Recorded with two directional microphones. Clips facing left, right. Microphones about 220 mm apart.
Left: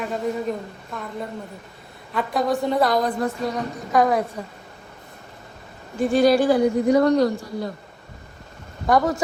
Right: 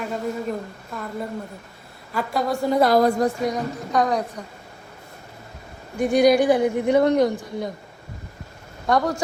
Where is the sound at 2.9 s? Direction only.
40° right (ahead or behind).